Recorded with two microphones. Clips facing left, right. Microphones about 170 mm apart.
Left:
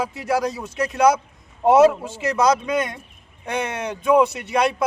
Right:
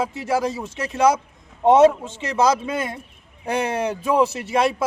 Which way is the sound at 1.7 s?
5° left (ahead or behind).